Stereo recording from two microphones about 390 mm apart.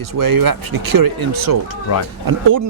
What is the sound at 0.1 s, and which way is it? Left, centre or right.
Speech, right.